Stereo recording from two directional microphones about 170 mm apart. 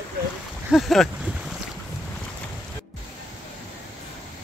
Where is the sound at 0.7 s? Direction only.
Centre (ahead or behind).